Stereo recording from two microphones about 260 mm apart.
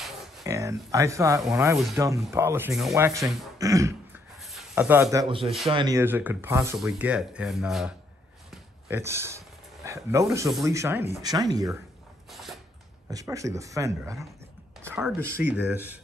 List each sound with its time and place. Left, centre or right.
0.4 s speech: centre
3.5 s throat clearing: centre
4.4 s speech: centre
8.5 s a sound: centre
10.2 s speech: centre
12.3 s a sound: centre
13.1 s speech: centre